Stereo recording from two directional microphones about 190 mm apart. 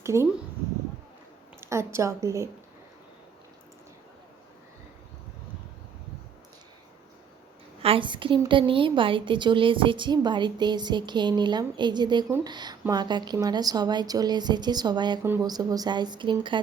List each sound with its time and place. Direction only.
0.0 s speech: 15° right (ahead or behind)
1.6 s a woman's voice: 15° right (ahead or behind)
7.8 s a woman's voice: 30° right (ahead or behind)